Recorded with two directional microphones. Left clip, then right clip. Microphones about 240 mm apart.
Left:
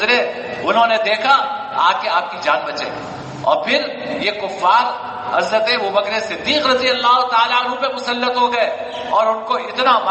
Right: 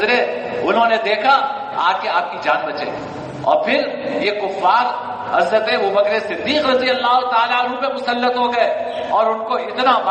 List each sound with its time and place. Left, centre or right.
0.0 s a man's voice: left